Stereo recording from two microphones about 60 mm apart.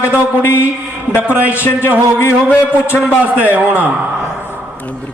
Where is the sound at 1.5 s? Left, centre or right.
Left.